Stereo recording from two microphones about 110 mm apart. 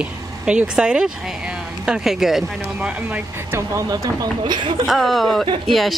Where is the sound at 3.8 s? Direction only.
35° right (ahead or behind).